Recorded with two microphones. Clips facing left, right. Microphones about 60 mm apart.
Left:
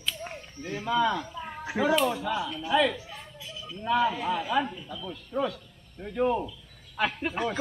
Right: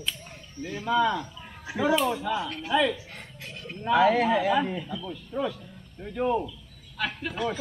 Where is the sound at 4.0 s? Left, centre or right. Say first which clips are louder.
Right 8 dB; right.